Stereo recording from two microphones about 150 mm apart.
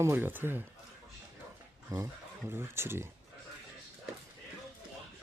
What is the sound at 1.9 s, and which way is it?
Speech, 15° right (ahead or behind).